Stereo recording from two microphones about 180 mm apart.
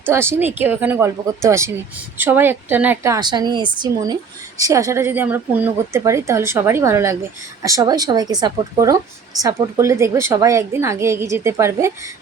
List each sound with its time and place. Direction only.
0.0 s a woman's voice: 15° right (ahead or behind)